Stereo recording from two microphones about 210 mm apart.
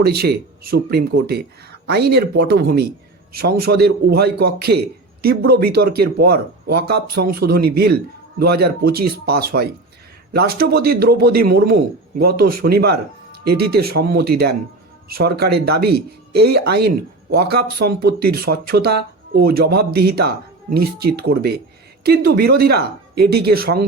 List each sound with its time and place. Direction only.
0.0 s speech: 50° right (ahead or behind)